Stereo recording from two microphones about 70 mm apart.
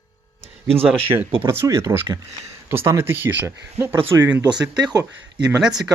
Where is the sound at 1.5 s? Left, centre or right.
Right.